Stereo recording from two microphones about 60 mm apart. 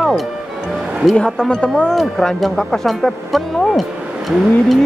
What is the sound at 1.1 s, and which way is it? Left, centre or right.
Music, centre.